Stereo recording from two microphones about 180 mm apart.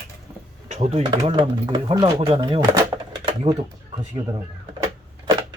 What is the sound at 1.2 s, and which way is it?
Speech, 25° right (ahead or behind).